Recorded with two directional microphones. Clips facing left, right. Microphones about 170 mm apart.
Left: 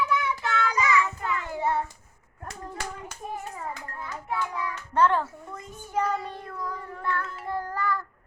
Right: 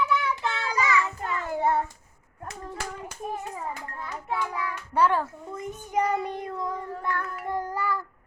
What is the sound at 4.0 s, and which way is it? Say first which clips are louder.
Speech: even; 25° right (ahead or behind).